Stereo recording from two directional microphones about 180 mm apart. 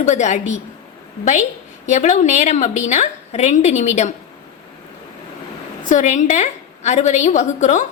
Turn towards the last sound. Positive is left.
turn(degrees=40)  # may be behind; listen again after turning